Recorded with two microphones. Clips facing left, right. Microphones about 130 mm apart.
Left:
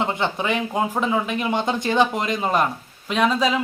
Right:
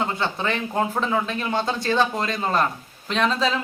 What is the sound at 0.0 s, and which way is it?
Speech, 15° left (ahead or behind).